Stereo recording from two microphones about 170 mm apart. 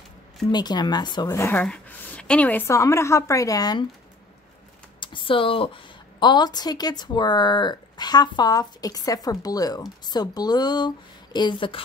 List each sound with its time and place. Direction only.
0.5 s a woman's voice: 25° left (ahead or behind)
5.0 s a woman's voice: 30° left (ahead or behind)